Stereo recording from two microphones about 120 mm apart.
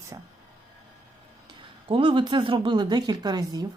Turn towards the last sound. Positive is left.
turn(degrees=-35)  # may be behind; listen again after turning